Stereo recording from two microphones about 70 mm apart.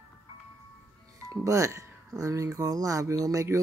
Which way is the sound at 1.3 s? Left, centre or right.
Right.